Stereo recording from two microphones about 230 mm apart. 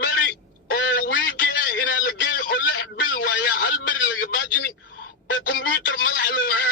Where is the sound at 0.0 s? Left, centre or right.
Left.